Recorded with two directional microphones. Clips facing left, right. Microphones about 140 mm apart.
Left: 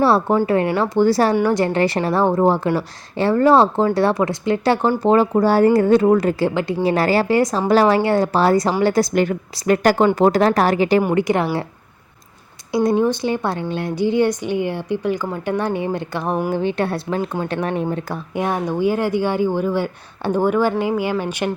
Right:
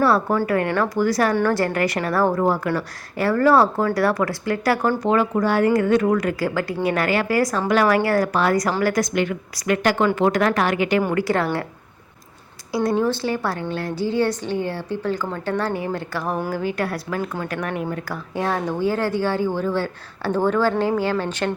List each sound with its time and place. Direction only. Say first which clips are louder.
0.0 s speech: left 3 dB; 30° left (ahead or behind)
1.4 s speech: left 3 dB; 20° left (ahead or behind)
9.1 s a woman's voice: left 4 dB; 40° left (ahead or behind)
11.0 s speech: left 3 dB; 20° left (ahead or behind)
12.7 s a woman's voice: left 3 dB; 20° left (ahead or behind)